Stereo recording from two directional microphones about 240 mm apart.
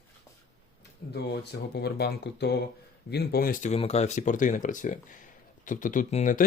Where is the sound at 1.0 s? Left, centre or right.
Left.